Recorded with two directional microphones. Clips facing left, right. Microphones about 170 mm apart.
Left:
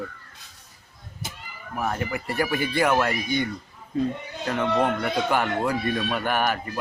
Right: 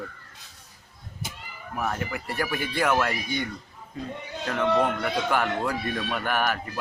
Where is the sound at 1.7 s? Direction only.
5° left (ahead or behind).